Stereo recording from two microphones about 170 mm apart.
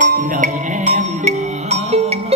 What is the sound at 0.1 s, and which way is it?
Music, 50° right (ahead or behind).